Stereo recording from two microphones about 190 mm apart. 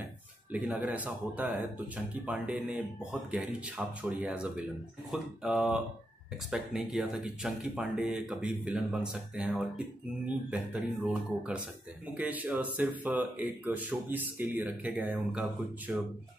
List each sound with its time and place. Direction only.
0.5 s speech: 5° right (ahead or behind)